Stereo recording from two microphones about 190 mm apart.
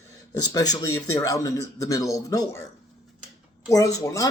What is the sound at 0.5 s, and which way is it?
Speech, 20° left (ahead or behind).